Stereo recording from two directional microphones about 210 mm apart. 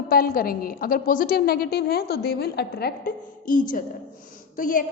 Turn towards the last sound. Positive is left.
turn(degrees=40)  # may be behind; listen again after turning